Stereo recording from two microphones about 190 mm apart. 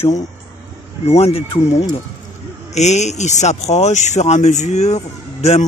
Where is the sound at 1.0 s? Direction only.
30° left (ahead or behind).